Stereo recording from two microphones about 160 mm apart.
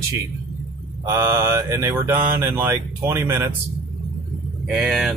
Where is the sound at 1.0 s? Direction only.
15° right (ahead or behind).